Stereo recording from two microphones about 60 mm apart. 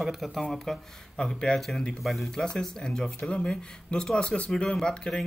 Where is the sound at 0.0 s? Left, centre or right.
Centre.